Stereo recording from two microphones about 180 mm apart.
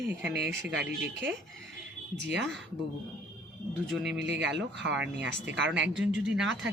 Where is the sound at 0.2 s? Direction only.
70° right (ahead or behind).